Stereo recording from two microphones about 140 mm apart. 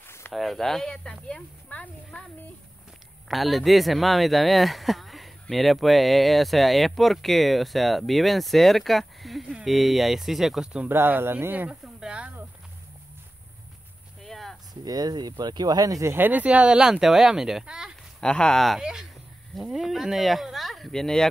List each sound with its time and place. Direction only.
0.0 s a sound: 15° left (ahead or behind)
0.3 s speech: centre (ahead or behind)
3.3 s speech: centre (ahead or behind)
10.9 s speech: 15° right (ahead or behind)
14.2 s a sound: centre (ahead or behind)
14.7 s speech: 30° right (ahead or behind); by 17.9 s 5° right (ahead or behind)
18.2 s speech: 5° left (ahead or behind)